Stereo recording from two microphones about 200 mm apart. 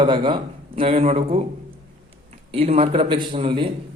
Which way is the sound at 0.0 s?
25° right (ahead or behind).